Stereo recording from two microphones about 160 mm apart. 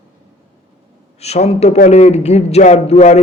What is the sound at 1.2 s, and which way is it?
A man's voice, 40° left (ahead or behind).